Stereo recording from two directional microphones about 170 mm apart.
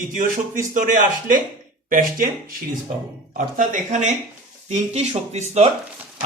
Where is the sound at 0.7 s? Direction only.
50° right (ahead or behind).